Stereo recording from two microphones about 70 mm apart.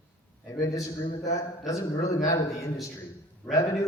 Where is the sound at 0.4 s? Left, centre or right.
Left.